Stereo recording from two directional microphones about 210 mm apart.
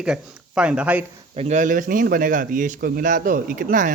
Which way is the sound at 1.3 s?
35° right (ahead or behind).